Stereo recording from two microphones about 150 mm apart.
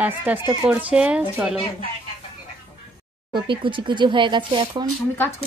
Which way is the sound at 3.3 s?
35° right (ahead or behind).